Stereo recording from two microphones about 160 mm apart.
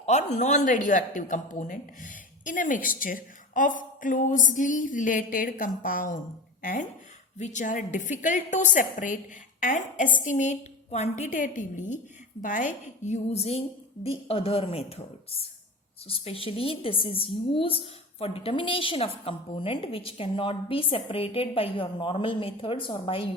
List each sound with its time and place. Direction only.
0.0 s a woman's voice: 45° left (ahead or behind)